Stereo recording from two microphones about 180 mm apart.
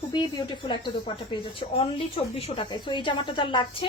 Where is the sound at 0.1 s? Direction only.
25° left (ahead or behind).